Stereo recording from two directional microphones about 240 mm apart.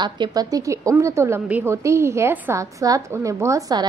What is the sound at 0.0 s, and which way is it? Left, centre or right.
A woman's voice, centre.